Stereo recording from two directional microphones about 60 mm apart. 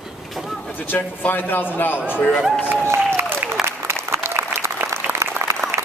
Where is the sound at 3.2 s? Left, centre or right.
Right.